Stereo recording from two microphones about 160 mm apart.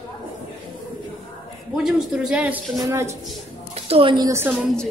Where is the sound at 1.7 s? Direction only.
5° right (ahead or behind).